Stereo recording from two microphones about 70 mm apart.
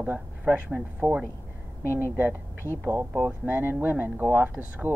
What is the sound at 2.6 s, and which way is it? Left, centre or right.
Speech, right.